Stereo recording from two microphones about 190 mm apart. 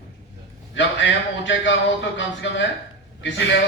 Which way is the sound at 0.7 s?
75° left (ahead or behind).